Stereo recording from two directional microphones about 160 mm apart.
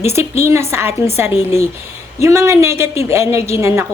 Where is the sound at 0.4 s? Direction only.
15° right (ahead or behind).